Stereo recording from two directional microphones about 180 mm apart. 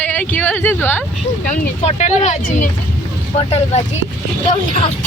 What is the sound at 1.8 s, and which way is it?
Speech, 40° left (ahead or behind).